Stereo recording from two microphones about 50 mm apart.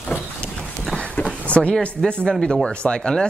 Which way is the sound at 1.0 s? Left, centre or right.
Left.